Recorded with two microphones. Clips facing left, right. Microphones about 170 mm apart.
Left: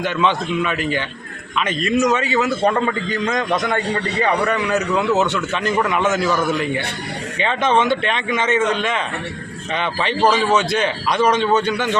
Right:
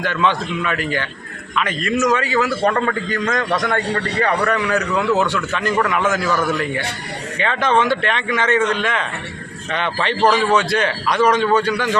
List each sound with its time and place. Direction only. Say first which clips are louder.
0.0 s a man's voice: even; 20° left (ahead or behind)